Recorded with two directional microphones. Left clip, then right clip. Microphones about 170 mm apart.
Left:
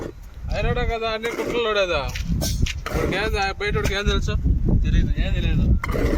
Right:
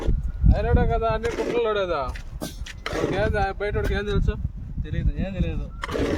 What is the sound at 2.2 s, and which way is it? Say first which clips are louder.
Speech: left 8 dB; 55° right (ahead or behind).